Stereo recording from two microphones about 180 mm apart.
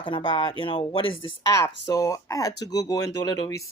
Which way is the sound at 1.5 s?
15° left (ahead or behind).